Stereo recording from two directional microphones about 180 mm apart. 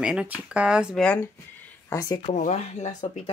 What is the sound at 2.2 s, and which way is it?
Speech, 40° left (ahead or behind).